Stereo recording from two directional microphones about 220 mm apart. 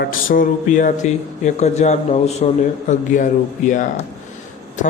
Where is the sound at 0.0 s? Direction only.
40° left (ahead or behind).